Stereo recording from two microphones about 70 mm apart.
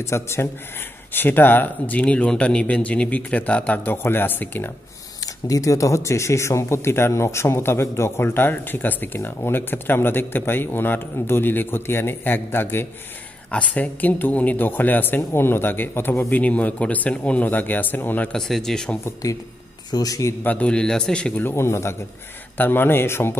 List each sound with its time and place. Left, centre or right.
0.0 s a man's voice: left
5.2 s speech: left
13.5 s a man's voice: left
18.3 s a man's voice: centre
19.9 s a man's voice: left
20.4 s a man's voice: centre
21.4 s speech: left